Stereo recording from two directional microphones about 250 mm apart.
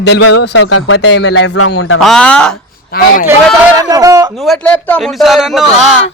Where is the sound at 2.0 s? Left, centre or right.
Centre.